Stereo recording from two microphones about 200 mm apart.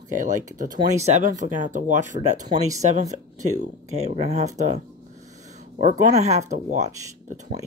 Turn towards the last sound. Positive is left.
turn(degrees=-35)  # may be behind; listen again after turning